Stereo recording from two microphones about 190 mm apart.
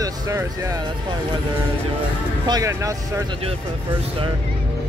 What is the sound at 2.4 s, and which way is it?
Speech, 20° right (ahead or behind).